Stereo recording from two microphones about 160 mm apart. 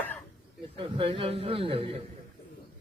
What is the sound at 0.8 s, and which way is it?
A man's voice, 30° right (ahead or behind).